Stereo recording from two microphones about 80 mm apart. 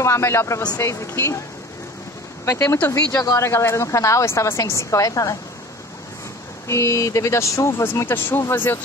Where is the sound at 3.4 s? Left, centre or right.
Left.